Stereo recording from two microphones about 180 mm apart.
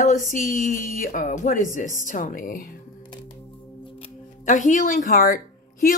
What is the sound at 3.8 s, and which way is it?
Music, 40° left (ahead or behind).